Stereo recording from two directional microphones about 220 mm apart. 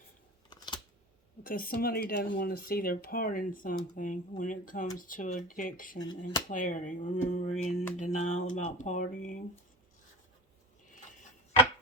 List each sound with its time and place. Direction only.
0.5 s scissors: 20° left (ahead or behind)
1.5 s speech: 40° left (ahead or behind)